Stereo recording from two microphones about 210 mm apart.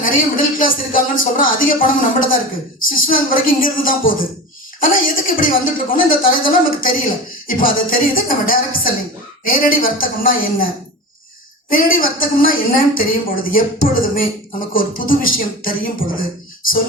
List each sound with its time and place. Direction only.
0.0 s speech: 40° left (ahead or behind)
11.7 s speech: 40° left (ahead or behind)